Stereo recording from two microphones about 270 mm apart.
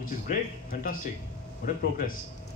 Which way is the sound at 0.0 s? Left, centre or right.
Left.